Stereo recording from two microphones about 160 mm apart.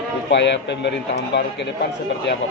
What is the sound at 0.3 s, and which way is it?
Speech, 90° left.